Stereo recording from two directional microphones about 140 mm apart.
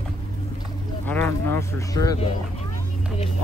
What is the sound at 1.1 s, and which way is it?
Speech, 15° left (ahead or behind).